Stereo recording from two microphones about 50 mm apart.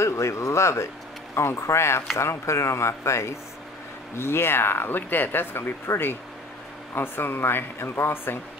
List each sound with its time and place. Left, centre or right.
0.0 s speech: left
4.2 s speech: left